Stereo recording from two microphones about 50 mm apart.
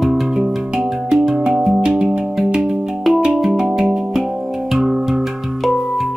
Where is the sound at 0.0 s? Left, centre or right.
Centre.